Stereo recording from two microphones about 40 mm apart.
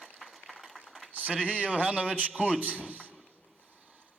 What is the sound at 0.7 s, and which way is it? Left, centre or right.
Typing, centre.